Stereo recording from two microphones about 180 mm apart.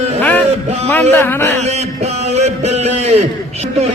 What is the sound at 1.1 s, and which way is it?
Speech, 10° left (ahead or behind).